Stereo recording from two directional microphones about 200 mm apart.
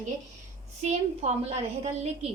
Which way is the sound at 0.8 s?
35° right (ahead or behind).